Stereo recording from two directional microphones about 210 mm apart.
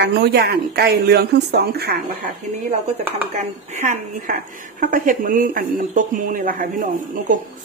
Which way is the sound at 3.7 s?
35° right (ahead or behind).